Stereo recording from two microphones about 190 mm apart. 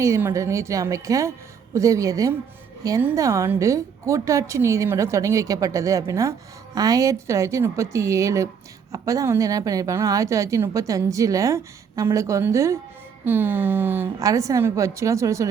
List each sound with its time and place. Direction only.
0.0 s a woman's voice: 15° right (ahead or behind)